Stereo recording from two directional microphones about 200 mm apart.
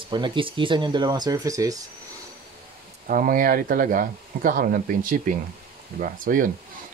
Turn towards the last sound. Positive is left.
turn(degrees=-45)  # may be behind; listen again after turning